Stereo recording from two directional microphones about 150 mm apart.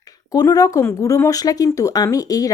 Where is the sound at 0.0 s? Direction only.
25° left (ahead or behind).